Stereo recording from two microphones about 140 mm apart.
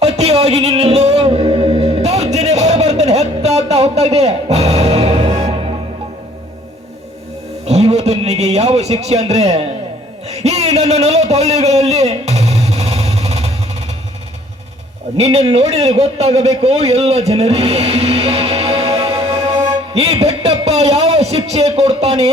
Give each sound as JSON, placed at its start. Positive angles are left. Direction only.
{"t": 0.0, "sound": "music", "side_deg": -50}
{"t": 7.6, "sound": "a sound", "side_deg": -50}
{"t": 15.5, "sound": "a man's voice", "side_deg": -50}
{"t": 19.2, "sound": "music", "side_deg": -45}
{"t": 19.9, "sound": "a man's voice", "side_deg": -45}